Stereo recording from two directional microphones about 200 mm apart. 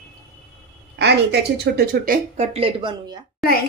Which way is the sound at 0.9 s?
55° right (ahead or behind).